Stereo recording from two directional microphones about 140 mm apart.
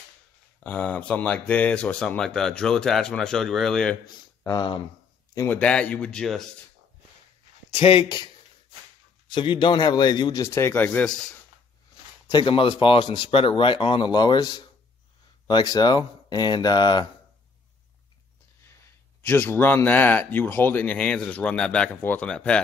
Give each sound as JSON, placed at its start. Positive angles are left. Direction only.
{"t": 0.7, "sound": "speech", "side_deg": 10}
{"t": 4.5, "sound": "a man's voice", "side_deg": 30}
{"t": 5.6, "sound": "speech", "side_deg": 10}
{"t": 7.8, "sound": "speech", "side_deg": 35}
{"t": 9.3, "sound": "speech", "side_deg": 35}
{"t": 10.4, "sound": "speech", "side_deg": 20}
{"t": 12.3, "sound": "speech", "side_deg": 35}
{"t": 19.2, "sound": "speech", "side_deg": 15}